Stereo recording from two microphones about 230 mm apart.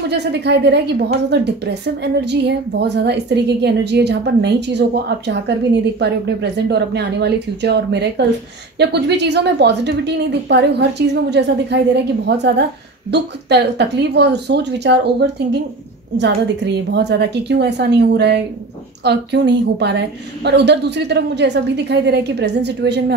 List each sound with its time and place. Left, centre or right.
0.1 s a woman's voice: right